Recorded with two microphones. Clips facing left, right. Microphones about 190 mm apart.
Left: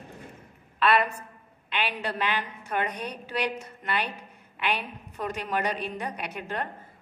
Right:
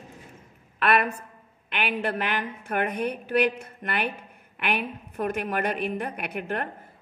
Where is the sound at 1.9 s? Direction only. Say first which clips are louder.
Right 5 dB; 55° right (ahead or behind).